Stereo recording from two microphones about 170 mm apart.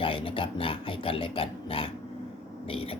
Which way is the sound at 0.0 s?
30° left (ahead or behind).